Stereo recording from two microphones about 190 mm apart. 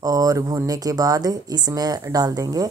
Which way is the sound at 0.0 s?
20° right (ahead or behind).